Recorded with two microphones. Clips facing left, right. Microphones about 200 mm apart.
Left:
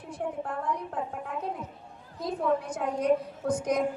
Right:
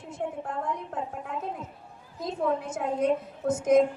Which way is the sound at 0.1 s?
25° right (ahead or behind).